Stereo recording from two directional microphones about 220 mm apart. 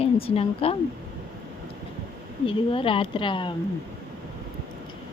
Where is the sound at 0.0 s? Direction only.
25° left (ahead or behind).